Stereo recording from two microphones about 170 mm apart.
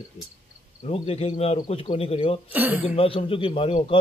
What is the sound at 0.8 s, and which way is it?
A man's voice, 35° left (ahead or behind).